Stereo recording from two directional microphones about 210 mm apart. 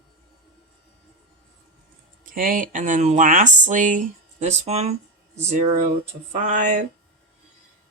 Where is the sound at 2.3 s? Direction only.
40° right (ahead or behind).